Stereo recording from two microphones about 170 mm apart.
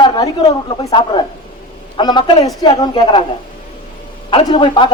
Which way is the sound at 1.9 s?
25° left (ahead or behind).